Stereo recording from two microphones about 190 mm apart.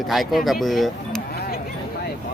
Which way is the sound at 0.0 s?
Centre (ahead or behind).